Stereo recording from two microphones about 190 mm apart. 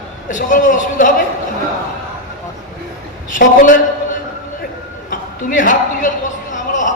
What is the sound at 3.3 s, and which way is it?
Speech, 45° left (ahead or behind).